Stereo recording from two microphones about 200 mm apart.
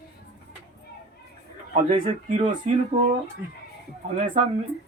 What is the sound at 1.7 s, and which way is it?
Speech, 35° right (ahead or behind).